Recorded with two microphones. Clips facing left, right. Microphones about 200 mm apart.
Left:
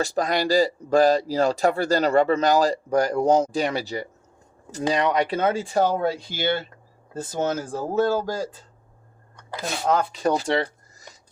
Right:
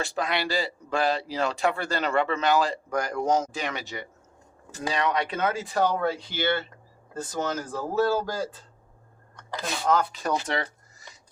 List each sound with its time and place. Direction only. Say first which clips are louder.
0.0 s speech: left 5 dB; 40° left (ahead or behind); by 10.1 s 20° left (ahead or behind)
10.2 s speech: left 6 dB; 30° left (ahead or behind)